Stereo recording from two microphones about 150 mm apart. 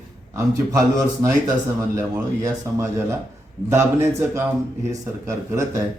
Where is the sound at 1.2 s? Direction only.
20° right (ahead or behind).